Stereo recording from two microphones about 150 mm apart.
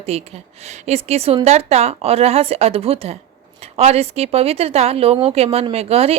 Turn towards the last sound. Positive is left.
turn(degrees=-40)  # may be behind; listen again after turning